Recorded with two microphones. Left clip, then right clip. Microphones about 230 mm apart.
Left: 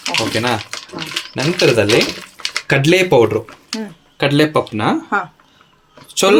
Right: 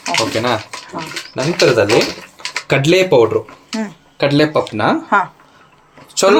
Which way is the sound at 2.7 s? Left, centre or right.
Left.